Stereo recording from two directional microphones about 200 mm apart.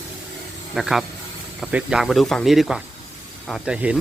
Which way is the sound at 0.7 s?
Centre (ahead or behind).